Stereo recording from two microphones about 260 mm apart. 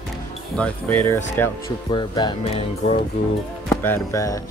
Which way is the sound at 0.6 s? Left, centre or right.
Centre.